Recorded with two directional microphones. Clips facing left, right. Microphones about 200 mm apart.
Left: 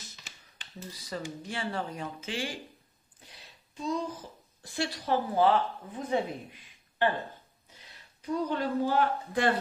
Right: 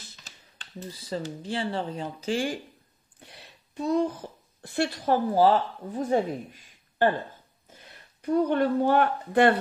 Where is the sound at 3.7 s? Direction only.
60° right (ahead or behind).